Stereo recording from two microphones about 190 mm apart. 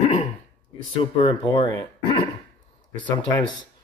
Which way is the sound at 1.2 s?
20° left (ahead or behind).